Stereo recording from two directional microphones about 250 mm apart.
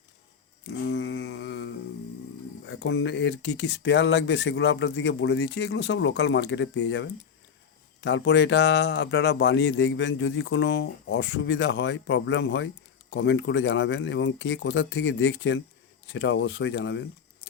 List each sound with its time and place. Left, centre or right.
0.6 s mantra: left
2.6 s speech: left